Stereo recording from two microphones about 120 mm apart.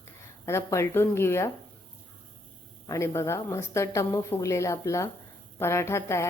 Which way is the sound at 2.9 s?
25° left (ahead or behind).